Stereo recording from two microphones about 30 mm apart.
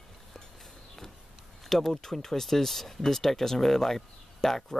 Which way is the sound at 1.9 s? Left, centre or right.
Centre.